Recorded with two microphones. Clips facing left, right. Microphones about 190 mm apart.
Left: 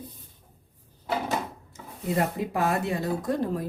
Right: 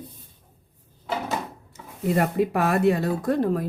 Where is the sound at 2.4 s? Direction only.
70° right (ahead or behind).